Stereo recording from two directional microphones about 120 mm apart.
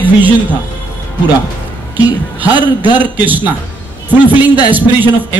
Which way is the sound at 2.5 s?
40° left (ahead or behind).